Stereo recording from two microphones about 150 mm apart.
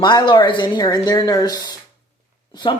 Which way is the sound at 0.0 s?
30° left (ahead or behind).